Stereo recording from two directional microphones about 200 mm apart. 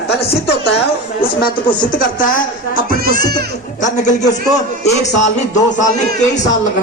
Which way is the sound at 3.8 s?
35° left (ahead or behind).